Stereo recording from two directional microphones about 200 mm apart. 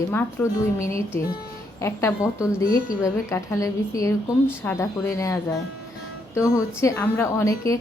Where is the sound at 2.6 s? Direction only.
45° left (ahead or behind).